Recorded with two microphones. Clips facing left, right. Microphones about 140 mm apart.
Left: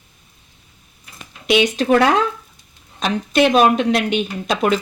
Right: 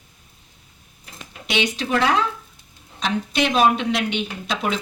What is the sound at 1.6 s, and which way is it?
Speech, 45° left (ahead or behind).